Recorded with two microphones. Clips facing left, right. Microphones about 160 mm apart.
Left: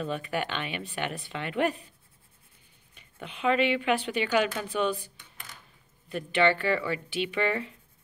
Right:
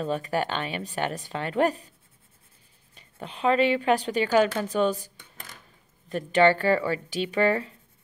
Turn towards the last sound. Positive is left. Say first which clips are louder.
# right 5 dB
turn(degrees=-40)  # may be behind; listen again after turning